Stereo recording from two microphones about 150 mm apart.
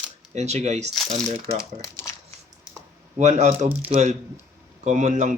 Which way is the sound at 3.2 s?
50° right (ahead or behind).